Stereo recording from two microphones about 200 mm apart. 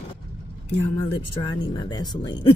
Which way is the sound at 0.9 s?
20° left (ahead or behind).